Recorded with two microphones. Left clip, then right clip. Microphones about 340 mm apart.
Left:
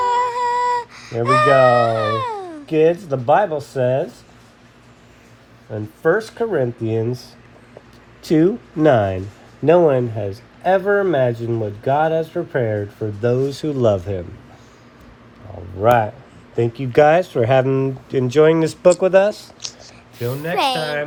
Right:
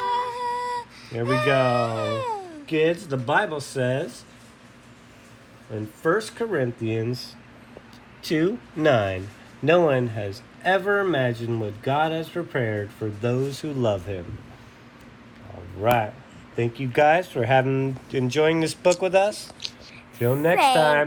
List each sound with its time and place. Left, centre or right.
0.0 s a sound: centre
2.6 s speech: left
6.0 s speech: left
8.4 s speech: left
16.6 s speech: left
20.1 s speech: centre